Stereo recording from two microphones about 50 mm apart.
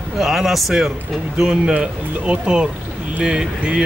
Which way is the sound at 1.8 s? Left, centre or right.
Centre.